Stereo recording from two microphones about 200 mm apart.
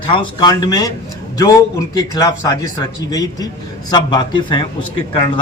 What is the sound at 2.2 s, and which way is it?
Speech, 15° left (ahead or behind).